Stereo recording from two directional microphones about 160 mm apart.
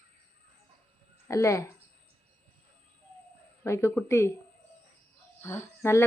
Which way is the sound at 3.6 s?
15° left (ahead or behind).